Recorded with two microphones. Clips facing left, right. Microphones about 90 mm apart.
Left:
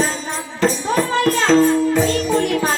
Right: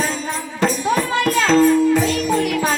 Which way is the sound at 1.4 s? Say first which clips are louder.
Right 1 dB; 30° left (ahead or behind).